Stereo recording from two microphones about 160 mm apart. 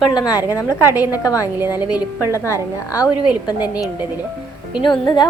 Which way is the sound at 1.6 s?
10° right (ahead or behind).